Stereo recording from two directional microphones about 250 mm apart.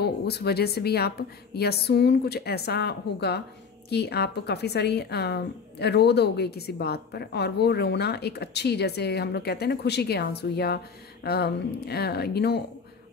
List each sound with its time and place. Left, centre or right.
0.0 s a woman's voice: left